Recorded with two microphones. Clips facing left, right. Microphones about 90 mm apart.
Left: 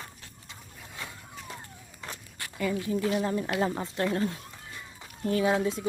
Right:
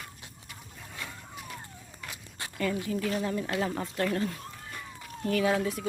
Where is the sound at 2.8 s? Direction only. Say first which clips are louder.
Left 3 dB; 25° left (ahead or behind).